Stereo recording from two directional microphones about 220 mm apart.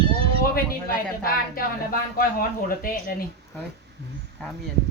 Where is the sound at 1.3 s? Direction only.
40° left (ahead or behind).